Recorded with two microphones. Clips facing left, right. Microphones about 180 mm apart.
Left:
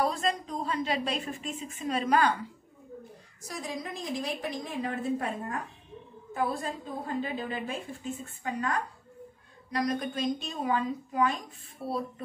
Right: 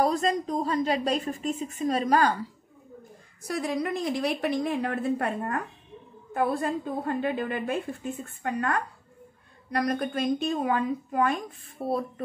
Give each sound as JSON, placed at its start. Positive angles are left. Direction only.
{"t": 0.0, "sound": "a woman's voice", "side_deg": -40}
{"t": 3.4, "sound": "a woman's voice", "side_deg": -60}